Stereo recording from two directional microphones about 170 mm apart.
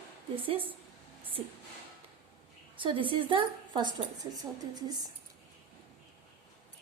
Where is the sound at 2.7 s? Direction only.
30° right (ahead or behind).